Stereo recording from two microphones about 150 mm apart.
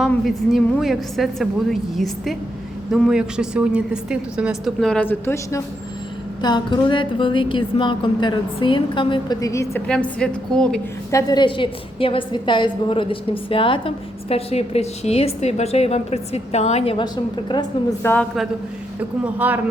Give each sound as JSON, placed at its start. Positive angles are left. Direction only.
{"t": 0.1, "sound": "a woman's voice", "side_deg": 0}
{"t": 9.8, "sound": "a woman's voice", "side_deg": 5}
{"t": 11.1, "sound": "a woman's voice", "side_deg": 25}
{"t": 18.0, "sound": "a woman's voice", "side_deg": 15}
{"t": 19.2, "sound": "speech", "side_deg": -10}